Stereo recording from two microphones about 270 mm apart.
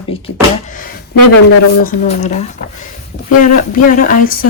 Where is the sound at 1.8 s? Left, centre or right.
Left.